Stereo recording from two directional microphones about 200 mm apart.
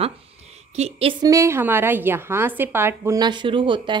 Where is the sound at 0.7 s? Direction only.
30° right (ahead or behind).